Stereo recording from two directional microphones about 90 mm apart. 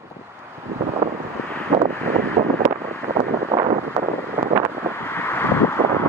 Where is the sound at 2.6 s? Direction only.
25° right (ahead or behind).